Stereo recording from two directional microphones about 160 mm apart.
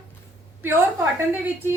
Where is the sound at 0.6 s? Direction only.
15° right (ahead or behind).